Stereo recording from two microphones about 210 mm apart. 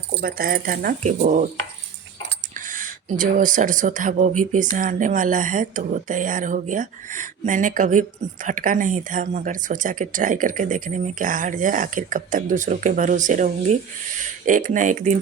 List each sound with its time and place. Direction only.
0.1 s speech: 45° right (ahead or behind)
2.6 s speech: 40° right (ahead or behind)